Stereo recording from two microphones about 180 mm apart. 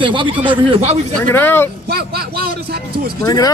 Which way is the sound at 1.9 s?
60° right (ahead or behind).